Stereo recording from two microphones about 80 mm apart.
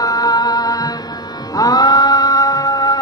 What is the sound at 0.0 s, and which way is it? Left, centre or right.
Music, left.